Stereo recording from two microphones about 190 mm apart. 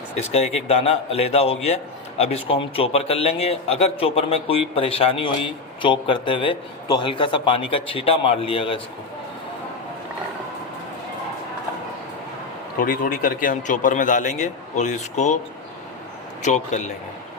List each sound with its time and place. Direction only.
0.2 s a man's voice: 35° left (ahead or behind)
12.8 s a man's voice: 50° left (ahead or behind)
16.4 s a man's voice: 40° left (ahead or behind)